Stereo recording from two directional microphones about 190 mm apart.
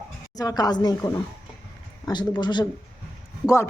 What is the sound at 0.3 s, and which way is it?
A woman's voice, 20° left (ahead or behind).